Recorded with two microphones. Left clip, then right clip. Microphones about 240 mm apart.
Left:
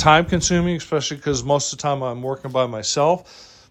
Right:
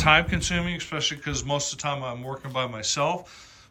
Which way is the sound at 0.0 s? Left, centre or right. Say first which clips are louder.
Left 5 dB; centre.